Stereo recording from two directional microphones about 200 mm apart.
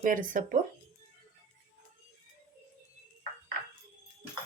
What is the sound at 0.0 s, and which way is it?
Speech, 40° right (ahead or behind).